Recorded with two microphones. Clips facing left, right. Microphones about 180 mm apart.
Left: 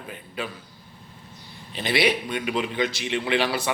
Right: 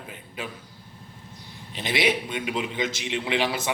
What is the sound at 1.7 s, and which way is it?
A man's voice, 15° right (ahead or behind).